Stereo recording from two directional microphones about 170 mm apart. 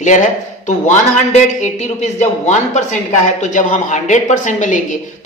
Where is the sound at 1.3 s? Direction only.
40° left (ahead or behind).